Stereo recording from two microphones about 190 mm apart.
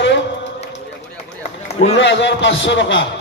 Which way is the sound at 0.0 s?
70° left (ahead or behind).